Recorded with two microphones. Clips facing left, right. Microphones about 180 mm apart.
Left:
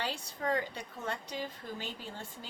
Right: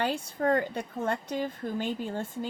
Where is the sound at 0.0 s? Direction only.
50° right (ahead or behind).